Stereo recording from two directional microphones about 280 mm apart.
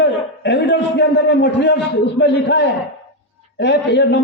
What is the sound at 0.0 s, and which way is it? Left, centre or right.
A man's voice, left.